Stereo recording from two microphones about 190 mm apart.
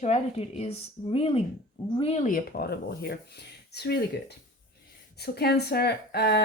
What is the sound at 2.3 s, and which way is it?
Speech, 50° left (ahead or behind).